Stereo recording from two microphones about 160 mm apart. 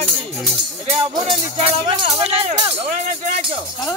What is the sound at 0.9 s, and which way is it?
Speech, 35° right (ahead or behind).